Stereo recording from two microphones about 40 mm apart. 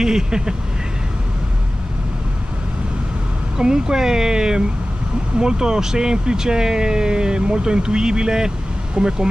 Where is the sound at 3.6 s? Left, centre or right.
Centre.